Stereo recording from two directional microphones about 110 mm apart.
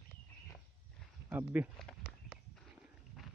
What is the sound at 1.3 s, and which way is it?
Speech, 20° right (ahead or behind).